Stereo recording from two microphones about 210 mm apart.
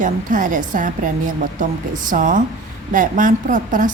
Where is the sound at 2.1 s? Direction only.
40° right (ahead or behind).